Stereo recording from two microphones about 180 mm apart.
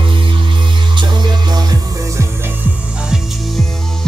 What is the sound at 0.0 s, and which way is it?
Music, 25° right (ahead or behind).